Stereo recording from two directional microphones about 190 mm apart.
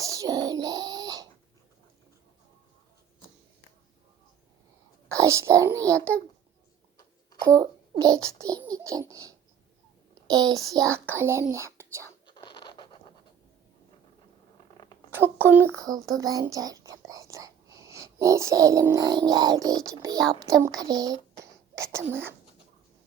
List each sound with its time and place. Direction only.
0.0 s bird: 15° right (ahead or behind)
5.0 s a child's voice: 15° right (ahead or behind)
5.8 s a child's voice: 5° left (ahead or behind)
7.4 s a child's voice: 15° right (ahead or behind)
12.2 s scratch: 25° left (ahead or behind)
15.1 s a child's voice: 10° right (ahead or behind)